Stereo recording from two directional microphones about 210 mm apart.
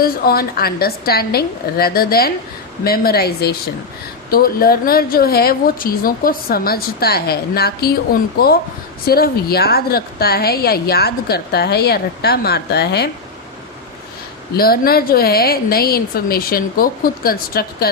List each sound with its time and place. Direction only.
0.0 s a woman's voice: 45° left (ahead or behind)
14.5 s a woman's voice: 45° left (ahead or behind)